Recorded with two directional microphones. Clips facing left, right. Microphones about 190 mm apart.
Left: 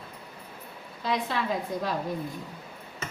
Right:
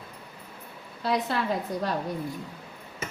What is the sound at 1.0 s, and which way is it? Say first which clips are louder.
Speech: right 2 dB; 5° right (ahead or behind).